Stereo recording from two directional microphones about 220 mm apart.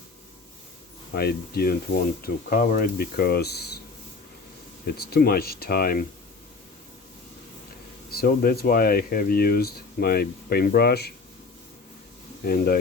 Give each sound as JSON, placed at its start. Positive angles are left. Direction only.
{"t": 1.1, "sound": "speech", "side_deg": 45}
{"t": 4.9, "sound": "speech", "side_deg": 45}
{"t": 8.1, "sound": "speech", "side_deg": 45}
{"t": 12.5, "sound": "speech", "side_deg": 45}